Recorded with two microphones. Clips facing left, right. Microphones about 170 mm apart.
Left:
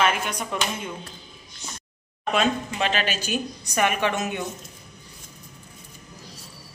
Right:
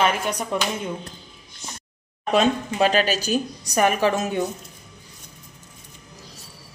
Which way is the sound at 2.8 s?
40° right (ahead or behind).